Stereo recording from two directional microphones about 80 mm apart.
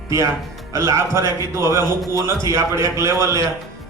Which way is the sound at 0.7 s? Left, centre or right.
Right.